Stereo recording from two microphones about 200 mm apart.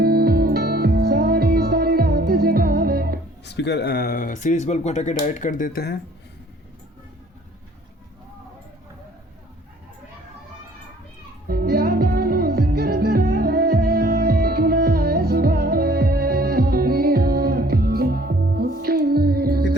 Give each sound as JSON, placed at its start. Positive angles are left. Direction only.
{"t": 0.0, "sound": "music", "side_deg": -50}
{"t": 3.4, "sound": "speech", "side_deg": 60}
{"t": 11.4, "sound": "music", "side_deg": -50}